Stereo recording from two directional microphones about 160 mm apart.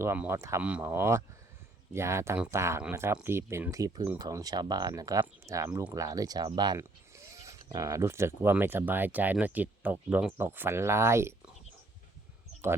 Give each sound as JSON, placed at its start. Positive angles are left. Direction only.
{"t": 0.0, "sound": "speech", "side_deg": -15}